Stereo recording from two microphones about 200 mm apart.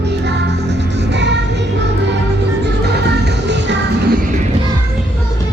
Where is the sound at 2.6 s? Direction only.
55° right (ahead or behind).